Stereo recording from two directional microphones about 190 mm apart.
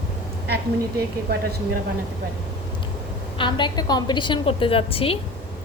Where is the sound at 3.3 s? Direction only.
25° left (ahead or behind).